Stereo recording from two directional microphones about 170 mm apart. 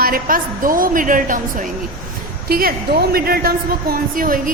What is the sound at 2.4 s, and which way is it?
A woman's voice, 60° right (ahead or behind).